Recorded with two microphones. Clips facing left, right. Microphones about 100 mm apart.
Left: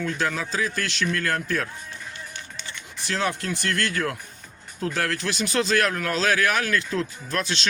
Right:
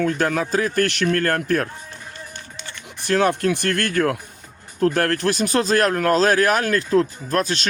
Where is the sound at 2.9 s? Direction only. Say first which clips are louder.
Right 8 dB; 55° right (ahead or behind).